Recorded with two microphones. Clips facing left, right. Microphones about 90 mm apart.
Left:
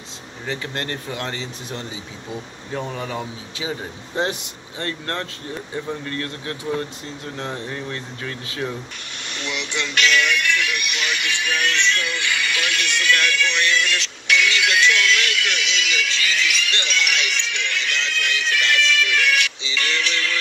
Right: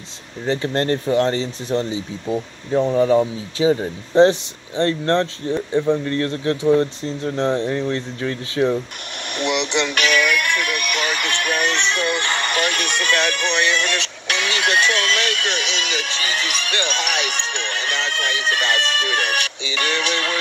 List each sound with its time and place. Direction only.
0.5 s speech: 35° right (ahead or behind)
9.4 s speech: 65° right (ahead or behind)
10.2 s music: 10° right (ahead or behind)
10.6 s speech: 50° right (ahead or behind)
11.5 s music: 15° right (ahead or behind)
12.0 s speech: 55° right (ahead or behind)
13.3 s music: 55° right (ahead or behind)
14.3 s speech: 40° right (ahead or behind)
16.8 s music: 45° right (ahead or behind)
18.8 s speech: 50° right (ahead or behind)